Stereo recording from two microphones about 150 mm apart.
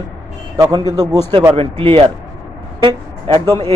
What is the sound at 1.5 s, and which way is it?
Speech, 40° right (ahead or behind).